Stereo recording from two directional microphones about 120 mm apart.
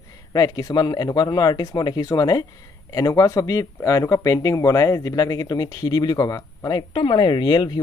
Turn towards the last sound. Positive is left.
turn(degrees=40)  # may be behind; listen again after turning